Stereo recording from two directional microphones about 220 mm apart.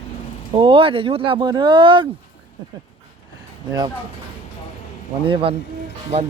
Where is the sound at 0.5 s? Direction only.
25° right (ahead or behind).